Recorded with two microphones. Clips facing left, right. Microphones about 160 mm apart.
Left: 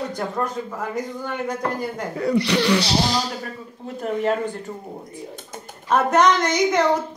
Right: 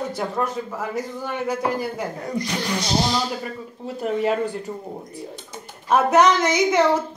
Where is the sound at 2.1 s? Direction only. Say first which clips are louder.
Left 7 dB; 75° left (ahead or behind).